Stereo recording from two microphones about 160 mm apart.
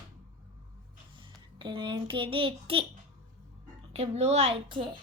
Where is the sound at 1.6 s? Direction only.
30° right (ahead or behind).